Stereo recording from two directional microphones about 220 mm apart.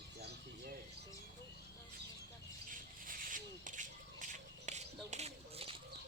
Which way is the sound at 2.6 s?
40° right (ahead or behind).